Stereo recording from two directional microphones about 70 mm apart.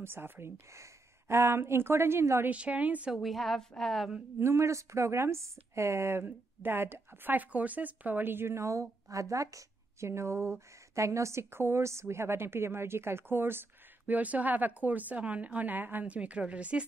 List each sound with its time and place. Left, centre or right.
0.0 s speech: right
2.5 s a woman's voice: right
3.2 s a woman's voice: centre
4.4 s speech: right
6.2 s a woman's voice: right